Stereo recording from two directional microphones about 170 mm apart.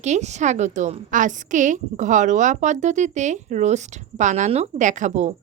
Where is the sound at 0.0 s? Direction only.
40° right (ahead or behind).